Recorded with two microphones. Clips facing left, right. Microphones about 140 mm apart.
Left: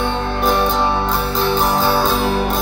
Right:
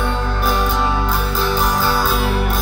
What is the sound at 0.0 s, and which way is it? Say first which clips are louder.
Music: left 2 dB; 25° left (ahead or behind).